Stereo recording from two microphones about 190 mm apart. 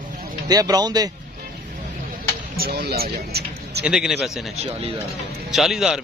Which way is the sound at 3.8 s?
5° right (ahead or behind).